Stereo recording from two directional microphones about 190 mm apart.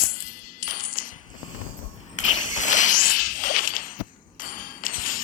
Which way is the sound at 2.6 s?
40° left (ahead or behind).